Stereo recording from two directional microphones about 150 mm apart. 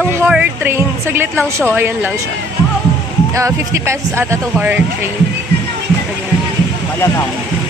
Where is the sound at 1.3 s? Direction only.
5° left (ahead or behind).